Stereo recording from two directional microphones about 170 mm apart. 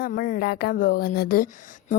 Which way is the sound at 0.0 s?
55° left (ahead or behind).